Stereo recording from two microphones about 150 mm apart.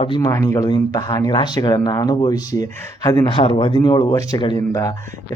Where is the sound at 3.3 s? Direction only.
35° left (ahead or behind).